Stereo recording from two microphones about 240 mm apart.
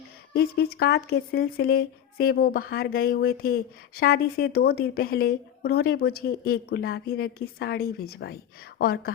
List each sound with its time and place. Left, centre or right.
0.3 s speech: left